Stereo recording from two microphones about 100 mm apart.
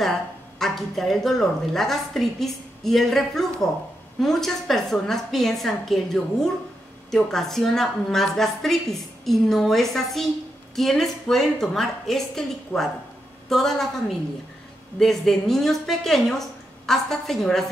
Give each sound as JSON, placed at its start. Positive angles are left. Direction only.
{"t": 0.6, "sound": "a woman's voice", "side_deg": 0}